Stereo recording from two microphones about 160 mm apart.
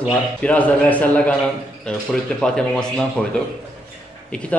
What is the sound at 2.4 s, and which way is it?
Speech, 5° left (ahead or behind).